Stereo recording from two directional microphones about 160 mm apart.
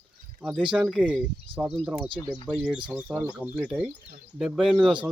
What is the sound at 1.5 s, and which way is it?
Speech, 35° right (ahead or behind).